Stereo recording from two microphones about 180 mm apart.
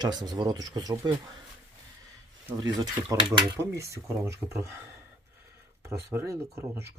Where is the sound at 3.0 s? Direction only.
20° right (ahead or behind).